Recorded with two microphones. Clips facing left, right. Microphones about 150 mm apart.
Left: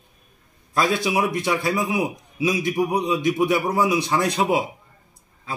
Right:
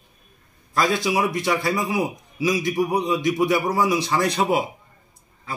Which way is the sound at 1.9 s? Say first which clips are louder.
Even; 15° left (ahead or behind).